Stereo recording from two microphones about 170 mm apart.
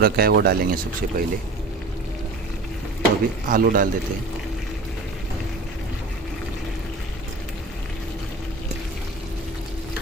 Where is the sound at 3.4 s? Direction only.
55° right (ahead or behind).